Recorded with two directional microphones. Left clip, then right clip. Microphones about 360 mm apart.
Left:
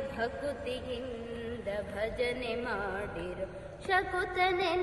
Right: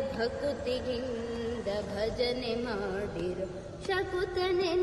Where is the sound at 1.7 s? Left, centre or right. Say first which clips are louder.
Even; centre.